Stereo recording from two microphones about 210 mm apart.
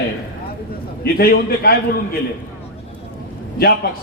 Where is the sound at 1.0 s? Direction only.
45° left (ahead or behind).